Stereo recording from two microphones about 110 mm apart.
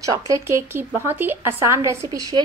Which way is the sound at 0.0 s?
30° right (ahead or behind).